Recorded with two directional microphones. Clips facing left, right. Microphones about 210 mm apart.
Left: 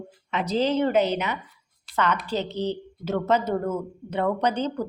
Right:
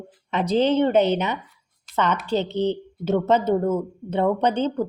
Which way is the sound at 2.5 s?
25° right (ahead or behind).